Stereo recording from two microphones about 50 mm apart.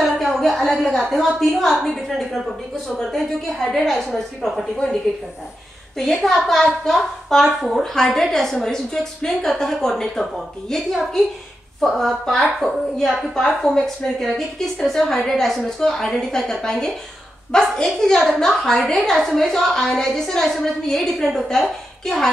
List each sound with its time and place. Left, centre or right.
0.0 s a sound: centre
1.1 s a woman's voice: centre
5.9 s a woman's voice: centre
11.8 s a woman's voice: centre